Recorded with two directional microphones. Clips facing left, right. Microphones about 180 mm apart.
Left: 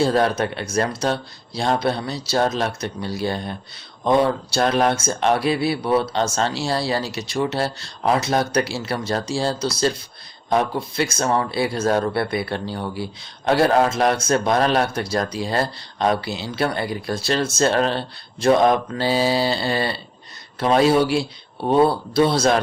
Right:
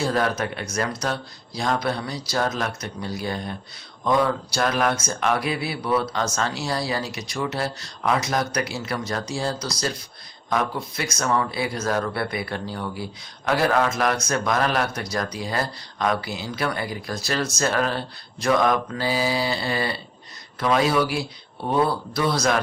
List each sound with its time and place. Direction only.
0.0 s speech: 30° left (ahead or behind)